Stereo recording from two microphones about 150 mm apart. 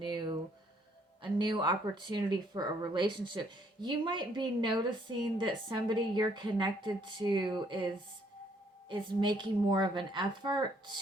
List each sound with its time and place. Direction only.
0.0 s speech: 30° right (ahead or behind)
8.9 s speech: 30° right (ahead or behind)